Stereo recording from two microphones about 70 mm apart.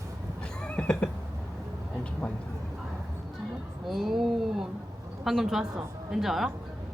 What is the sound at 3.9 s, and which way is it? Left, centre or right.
A woman's voice, centre.